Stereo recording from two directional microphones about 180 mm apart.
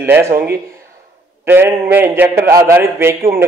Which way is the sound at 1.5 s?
10° right (ahead or behind).